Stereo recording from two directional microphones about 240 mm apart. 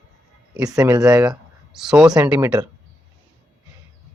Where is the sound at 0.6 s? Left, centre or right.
Centre.